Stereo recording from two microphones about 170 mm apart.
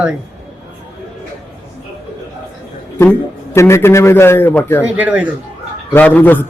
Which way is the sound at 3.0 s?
15° left (ahead or behind).